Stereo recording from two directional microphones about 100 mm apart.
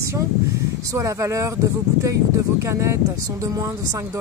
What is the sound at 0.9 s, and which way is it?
Speech, 30° right (ahead or behind).